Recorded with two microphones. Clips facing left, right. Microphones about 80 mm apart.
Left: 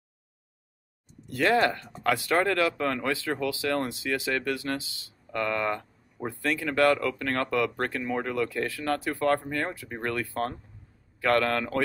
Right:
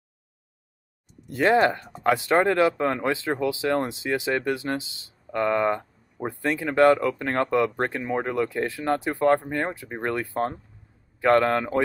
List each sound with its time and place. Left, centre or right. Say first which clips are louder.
1.2 s speech: right 4 dB; right